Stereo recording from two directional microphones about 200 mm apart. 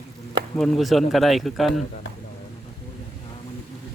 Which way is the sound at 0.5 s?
Centre (ahead or behind).